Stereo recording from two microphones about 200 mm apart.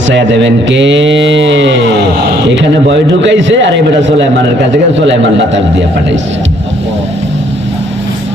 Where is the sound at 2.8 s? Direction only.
65° right (ahead or behind).